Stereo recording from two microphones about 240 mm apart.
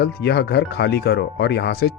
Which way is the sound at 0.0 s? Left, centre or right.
Left.